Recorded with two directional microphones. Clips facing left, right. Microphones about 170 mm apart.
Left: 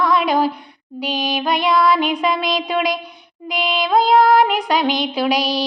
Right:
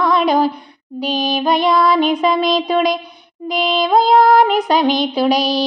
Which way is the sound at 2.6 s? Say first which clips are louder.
Right 4 dB; 40° right (ahead or behind).